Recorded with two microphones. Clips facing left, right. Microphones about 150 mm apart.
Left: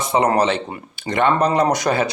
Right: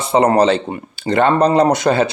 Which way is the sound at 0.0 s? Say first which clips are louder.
Right 4 dB; 30° right (ahead or behind).